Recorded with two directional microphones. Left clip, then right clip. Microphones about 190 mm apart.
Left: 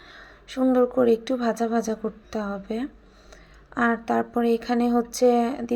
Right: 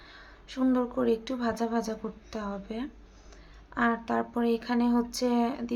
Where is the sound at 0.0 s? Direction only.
20° left (ahead or behind).